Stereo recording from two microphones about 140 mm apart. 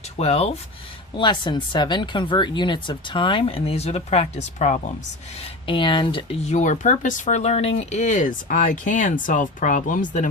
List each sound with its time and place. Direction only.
0.2 s speech: 50° left (ahead or behind)
1.1 s speech: 35° left (ahead or behind); by 4.8 s 55° left (ahead or behind)
5.6 s speech: 35° left (ahead or behind)
6.4 s speech: 60° left (ahead or behind)